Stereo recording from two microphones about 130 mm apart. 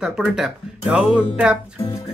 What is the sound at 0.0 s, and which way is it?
Speech, 5° right (ahead or behind).